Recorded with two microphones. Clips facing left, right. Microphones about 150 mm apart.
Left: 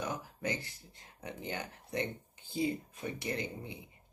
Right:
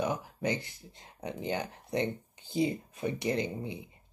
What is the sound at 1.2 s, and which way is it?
Speech, 25° right (ahead or behind).